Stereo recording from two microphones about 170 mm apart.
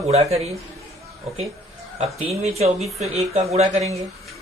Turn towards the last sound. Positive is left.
turn(degrees=-35)  # may be behind; listen again after turning